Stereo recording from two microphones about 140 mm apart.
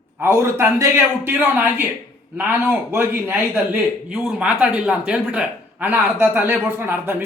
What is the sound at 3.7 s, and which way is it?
Speech, 5° right (ahead or behind).